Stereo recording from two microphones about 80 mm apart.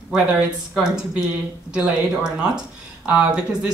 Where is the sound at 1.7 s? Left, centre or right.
Centre.